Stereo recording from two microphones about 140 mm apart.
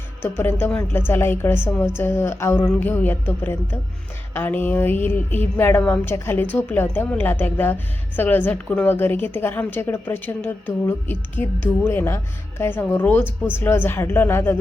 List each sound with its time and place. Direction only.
0.2 s a woman's voice: 15° left (ahead or behind)